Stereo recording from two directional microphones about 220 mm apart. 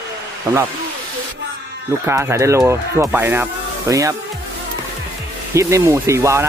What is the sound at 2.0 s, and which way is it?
Speech, 10° right (ahead or behind).